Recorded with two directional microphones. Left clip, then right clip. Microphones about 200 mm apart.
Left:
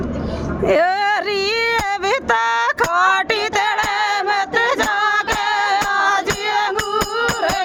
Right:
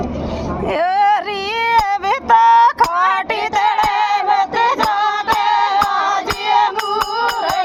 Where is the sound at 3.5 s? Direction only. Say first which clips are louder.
Right 3 dB; 50° left (ahead or behind).